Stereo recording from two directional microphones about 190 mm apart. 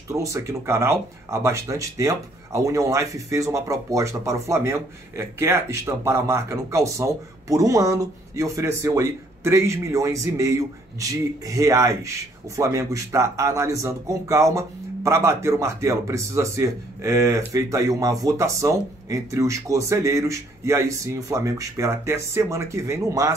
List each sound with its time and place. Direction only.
0.1 s a man's voice: 15° right (ahead or behind)